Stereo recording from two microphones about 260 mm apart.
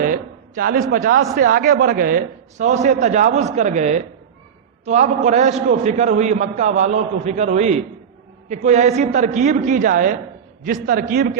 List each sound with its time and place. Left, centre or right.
0.0 s a man's voice: right